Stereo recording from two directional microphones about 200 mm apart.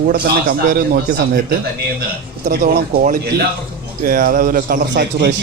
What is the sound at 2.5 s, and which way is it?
Speech, 45° right (ahead or behind).